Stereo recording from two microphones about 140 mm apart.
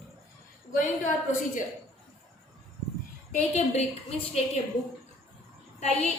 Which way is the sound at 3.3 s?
50° left (ahead or behind).